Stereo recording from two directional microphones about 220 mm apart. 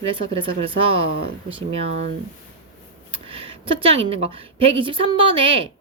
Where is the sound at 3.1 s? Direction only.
25° right (ahead or behind).